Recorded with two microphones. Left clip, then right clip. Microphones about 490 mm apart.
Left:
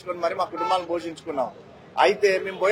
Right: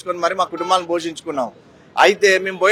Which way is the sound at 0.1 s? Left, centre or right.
Right.